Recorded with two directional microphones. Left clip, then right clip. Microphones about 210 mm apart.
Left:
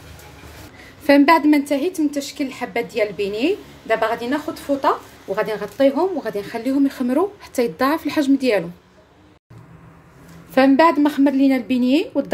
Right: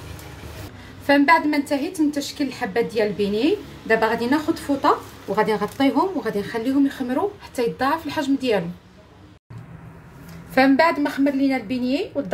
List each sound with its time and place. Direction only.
1.0 s a woman's voice: 35° left (ahead or behind)
4.8 s speech: 20° left (ahead or behind)
10.5 s a woman's voice: 25° left (ahead or behind)